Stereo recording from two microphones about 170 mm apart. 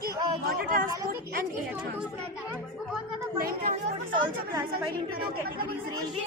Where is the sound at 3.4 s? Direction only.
60° right (ahead or behind).